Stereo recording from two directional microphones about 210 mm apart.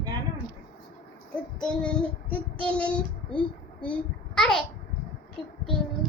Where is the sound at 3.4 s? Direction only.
5° left (ahead or behind).